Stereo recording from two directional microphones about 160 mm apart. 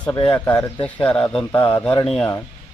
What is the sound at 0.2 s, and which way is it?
Speech, 30° left (ahead or behind).